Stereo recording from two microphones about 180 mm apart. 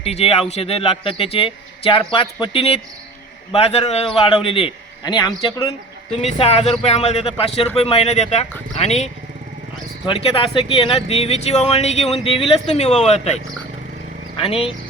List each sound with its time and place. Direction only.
0.0 s a man's voice: 35° left (ahead or behind)
6.2 s a man's voice: 35° left (ahead or behind)
10.1 s a man's voice: 30° left (ahead or behind)